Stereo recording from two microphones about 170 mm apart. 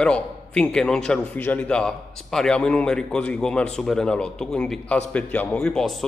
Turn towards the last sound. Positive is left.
turn(degrees=5)  # may be behind; listen again after turning